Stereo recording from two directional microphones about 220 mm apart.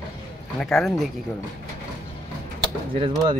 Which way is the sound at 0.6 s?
Centre (ahead or behind).